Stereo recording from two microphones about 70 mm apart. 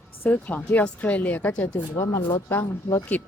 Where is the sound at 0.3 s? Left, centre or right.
Left.